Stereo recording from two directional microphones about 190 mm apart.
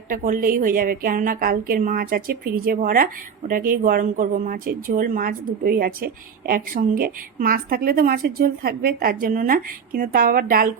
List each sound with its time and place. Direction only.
0.1 s a woman's voice: 45° right (ahead or behind)